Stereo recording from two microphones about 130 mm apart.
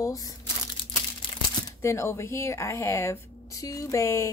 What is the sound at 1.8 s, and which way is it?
A woman's voice, 20° left (ahead or behind).